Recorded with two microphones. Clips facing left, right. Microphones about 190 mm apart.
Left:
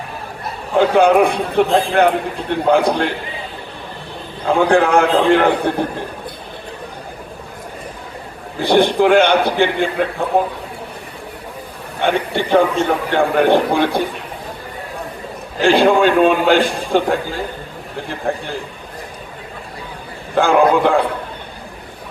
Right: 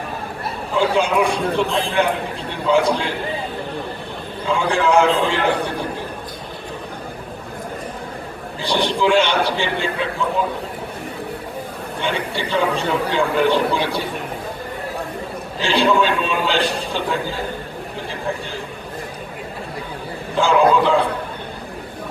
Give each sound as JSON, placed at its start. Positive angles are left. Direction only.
{"t": 0.8, "sound": "a man's voice", "side_deg": 55}
{"t": 4.4, "sound": "a man's voice", "side_deg": 55}
{"t": 8.5, "sound": "a man's voice", "side_deg": 55}
{"t": 12.0, "sound": "a man's voice", "side_deg": 55}
{"t": 15.6, "sound": "a man's voice", "side_deg": 50}
{"t": 20.3, "sound": "a man's voice", "side_deg": 55}